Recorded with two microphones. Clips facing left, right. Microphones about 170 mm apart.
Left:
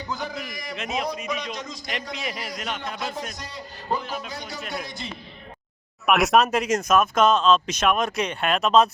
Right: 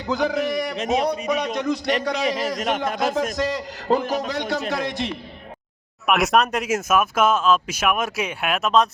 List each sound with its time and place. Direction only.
0.1 s a man's voice: 85° right
0.3 s speech: 65° right (ahead or behind)
0.8 s speech: 40° right (ahead or behind)
1.4 s speech: 55° right (ahead or behind)
2.4 s a man's voice: 45° right (ahead or behind)
3.0 s a man's voice: 90° right
4.0 s a man's voice: 45° right (ahead or behind)
4.3 s a man's voice: 80° right
4.7 s a man's voice: 90° right
6.1 s speech: centre (ahead or behind)